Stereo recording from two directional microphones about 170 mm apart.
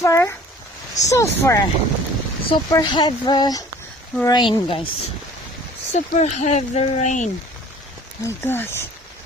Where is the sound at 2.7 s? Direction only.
25° left (ahead or behind).